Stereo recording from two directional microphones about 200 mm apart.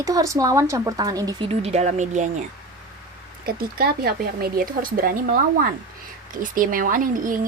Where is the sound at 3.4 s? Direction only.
50° right (ahead or behind).